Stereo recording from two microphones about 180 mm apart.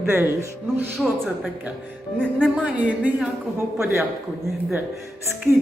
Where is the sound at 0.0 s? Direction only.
10° right (ahead or behind).